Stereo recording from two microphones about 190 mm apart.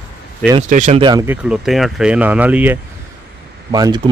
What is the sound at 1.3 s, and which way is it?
Speech, 5° right (ahead or behind).